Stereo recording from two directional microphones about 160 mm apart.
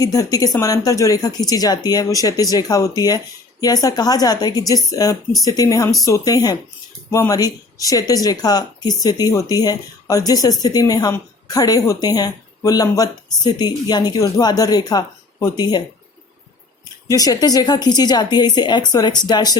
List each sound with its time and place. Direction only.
0.0 s speech: 25° left (ahead or behind)
17.1 s speech: 25° left (ahead or behind)